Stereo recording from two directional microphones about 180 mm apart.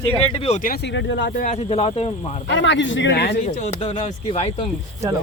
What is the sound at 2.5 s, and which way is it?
Speech, 80° left.